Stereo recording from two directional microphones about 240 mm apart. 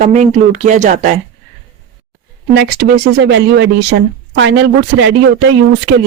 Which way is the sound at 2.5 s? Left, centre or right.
Right.